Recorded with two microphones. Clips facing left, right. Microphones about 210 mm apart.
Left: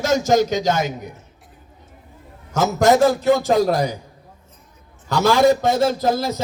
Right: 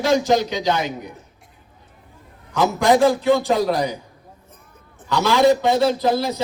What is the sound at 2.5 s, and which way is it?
A man's voice, 45° left (ahead or behind).